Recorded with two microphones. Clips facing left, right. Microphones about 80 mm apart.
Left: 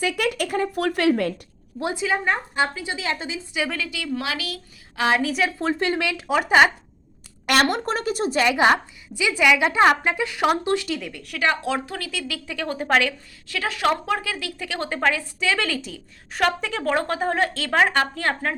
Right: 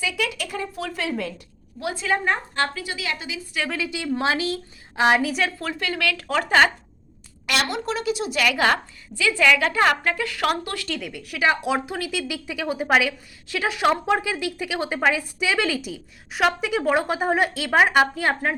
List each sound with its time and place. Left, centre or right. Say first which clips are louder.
0.0 s speech: left 4 dB; left
1.8 s a woman's voice: left 3 dB; left
2.0 s a woman's voice: right 1 dB; centre
2.6 s a woman's voice: left 1 dB; left
3.8 s a woman's voice: right 4 dB; right
5.2 s a woman's voice: left 1 dB; centre
5.5 s a woman's voice: left 5 dB; left; by 6.7 s centre
7.4 s a woman's voice: left 4 dB; left
11.1 s a woman's voice: right 2 dB; centre